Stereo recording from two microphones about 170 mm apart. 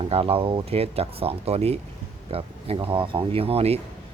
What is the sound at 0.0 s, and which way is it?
Speech, 35° right (ahead or behind).